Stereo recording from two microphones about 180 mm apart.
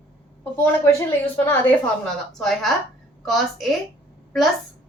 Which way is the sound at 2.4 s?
Centre (ahead or behind).